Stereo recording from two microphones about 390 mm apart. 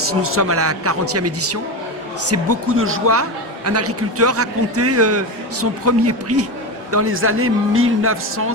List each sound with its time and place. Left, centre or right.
0.0 s a man's voice: right